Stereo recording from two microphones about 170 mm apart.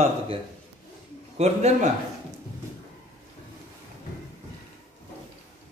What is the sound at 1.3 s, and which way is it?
Speech, 40° right (ahead or behind).